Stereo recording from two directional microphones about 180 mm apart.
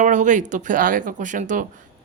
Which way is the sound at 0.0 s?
45° right (ahead or behind).